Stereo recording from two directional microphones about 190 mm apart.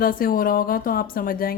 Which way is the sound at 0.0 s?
50° left (ahead or behind).